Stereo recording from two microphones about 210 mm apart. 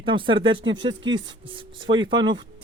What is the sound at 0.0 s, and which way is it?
Speech, 25° right (ahead or behind).